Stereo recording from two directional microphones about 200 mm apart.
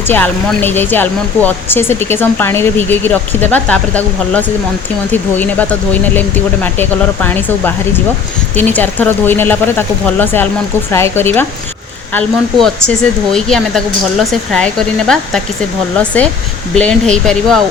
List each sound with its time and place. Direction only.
0.1 s a woman's voice: 10° left (ahead or behind)